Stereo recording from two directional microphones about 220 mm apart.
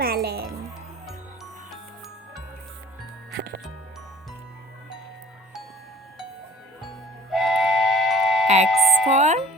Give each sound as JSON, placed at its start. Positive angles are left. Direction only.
{"t": 0.0, "sound": "music", "side_deg": -45}
{"t": 6.8, "sound": "steam whistle", "side_deg": 0}
{"t": 8.6, "sound": "music", "side_deg": 0}
{"t": 9.1, "sound": "music", "side_deg": -30}